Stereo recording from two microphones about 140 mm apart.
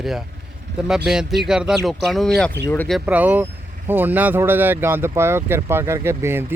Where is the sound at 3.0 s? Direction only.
10° right (ahead or behind).